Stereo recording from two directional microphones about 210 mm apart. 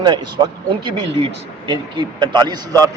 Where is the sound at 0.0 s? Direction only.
20° right (ahead or behind).